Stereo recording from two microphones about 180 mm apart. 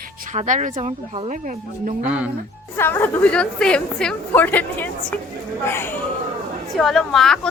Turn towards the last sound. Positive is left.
turn(degrees=5)  # may be behind; listen again after turning